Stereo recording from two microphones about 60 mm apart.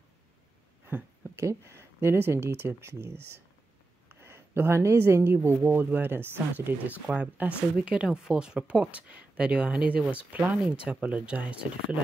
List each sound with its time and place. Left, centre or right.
1.3 s speech: right
4.1 s a sound: right
4.9 s speech: right